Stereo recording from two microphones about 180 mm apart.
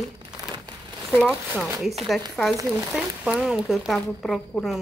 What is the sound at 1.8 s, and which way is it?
Speech, centre (ahead or behind).